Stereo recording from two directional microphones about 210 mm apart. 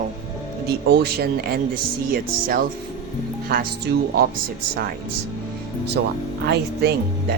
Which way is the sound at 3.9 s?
55° right (ahead or behind).